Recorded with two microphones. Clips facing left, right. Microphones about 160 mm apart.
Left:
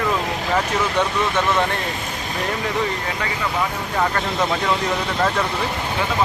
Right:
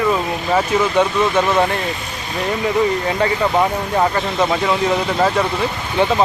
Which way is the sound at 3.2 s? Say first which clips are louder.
Right 13 dB; 30° right (ahead or behind).